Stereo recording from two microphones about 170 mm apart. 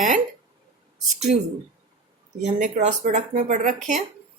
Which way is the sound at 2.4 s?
45° right (ahead or behind).